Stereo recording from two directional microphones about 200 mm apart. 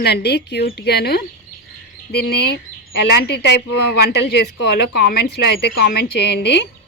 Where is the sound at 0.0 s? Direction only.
55° left (ahead or behind).